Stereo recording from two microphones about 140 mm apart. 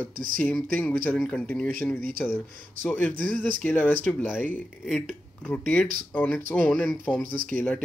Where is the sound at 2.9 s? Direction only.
10° left (ahead or behind).